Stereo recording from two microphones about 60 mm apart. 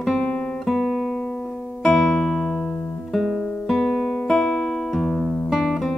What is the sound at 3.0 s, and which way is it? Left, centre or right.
Guitar, centre.